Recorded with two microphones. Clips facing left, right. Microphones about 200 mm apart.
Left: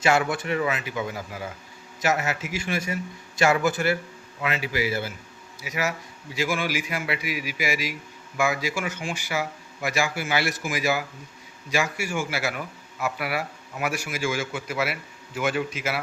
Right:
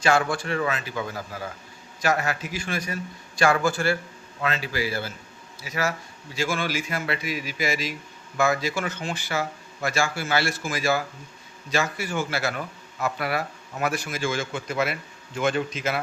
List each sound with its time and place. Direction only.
0.0 s a man's voice: 20° left (ahead or behind)